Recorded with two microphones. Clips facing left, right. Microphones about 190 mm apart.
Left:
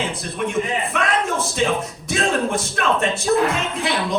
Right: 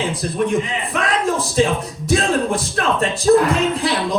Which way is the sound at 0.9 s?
35° right (ahead or behind).